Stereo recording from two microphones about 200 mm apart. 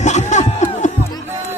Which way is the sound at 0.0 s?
35° left (ahead or behind).